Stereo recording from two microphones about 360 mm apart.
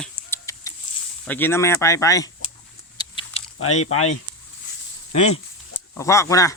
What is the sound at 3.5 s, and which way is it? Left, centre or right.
Speech, left.